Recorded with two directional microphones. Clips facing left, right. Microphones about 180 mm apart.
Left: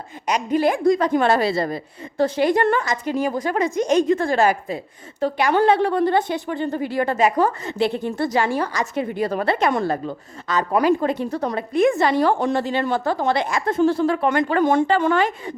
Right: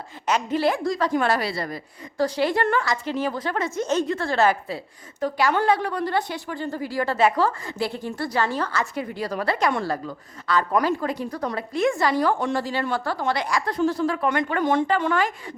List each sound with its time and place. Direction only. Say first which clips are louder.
0.3 s a woman's voice: left 3 dB; 15° left (ahead or behind)
5.2 s a woman's voice: left 4 dB; 30° left (ahead or behind)
12.5 s a woman's voice: left 4 dB; 20° left (ahead or behind)